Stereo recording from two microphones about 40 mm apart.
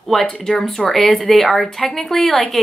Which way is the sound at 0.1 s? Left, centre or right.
Centre.